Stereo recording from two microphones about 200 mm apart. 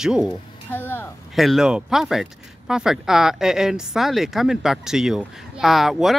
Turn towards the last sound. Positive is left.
turn(degrees=0)  # may be behind; listen again after turning